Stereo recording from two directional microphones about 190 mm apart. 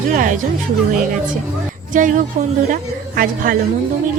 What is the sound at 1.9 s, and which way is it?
A woman's voice, 45° right (ahead or behind).